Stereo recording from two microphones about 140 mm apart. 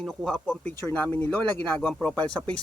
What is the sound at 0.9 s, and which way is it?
Speech, 15° left (ahead or behind).